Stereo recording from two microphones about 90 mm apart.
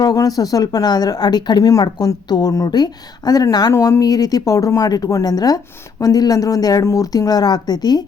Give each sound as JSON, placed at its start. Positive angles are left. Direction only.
{"t": 0.0, "sound": "a woman's voice", "side_deg": 45}
{"t": 3.7, "sound": "a woman's voice", "side_deg": 35}